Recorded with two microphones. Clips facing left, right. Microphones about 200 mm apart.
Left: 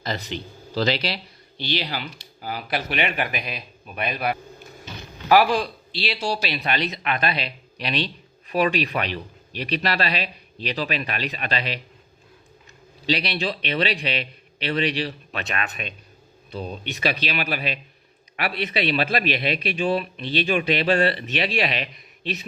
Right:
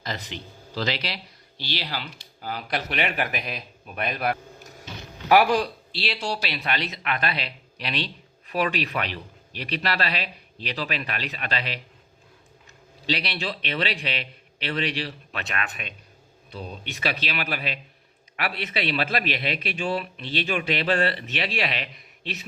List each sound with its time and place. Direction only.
0.0 s speech: 35° left (ahead or behind)
1.5 s speech: 20° left (ahead or behind); by 4.4 s centre (ahead or behind)
5.3 s a man's voice: 10° right (ahead or behind)
6.0 s speech: 5° left (ahead or behind)
13.1 s speech: 15° left (ahead or behind)